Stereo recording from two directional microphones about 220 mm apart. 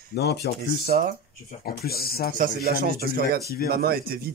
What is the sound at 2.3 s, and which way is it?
Speech, 40° right (ahead or behind).